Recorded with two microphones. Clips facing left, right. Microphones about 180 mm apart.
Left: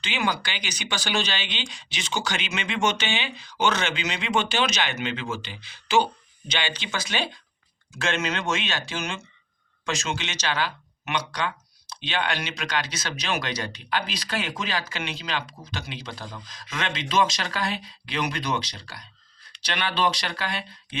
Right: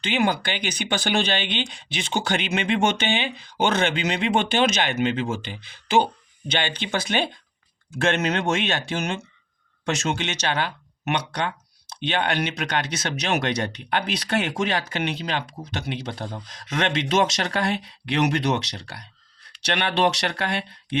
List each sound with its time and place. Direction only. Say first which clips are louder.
0.0 s speech: right 5 dB; 55° right (ahead or behind)